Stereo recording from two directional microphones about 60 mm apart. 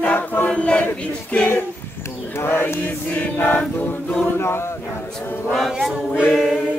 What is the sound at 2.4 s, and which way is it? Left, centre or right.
Speech, left.